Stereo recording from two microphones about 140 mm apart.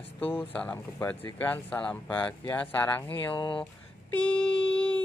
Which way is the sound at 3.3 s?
35° left (ahead or behind).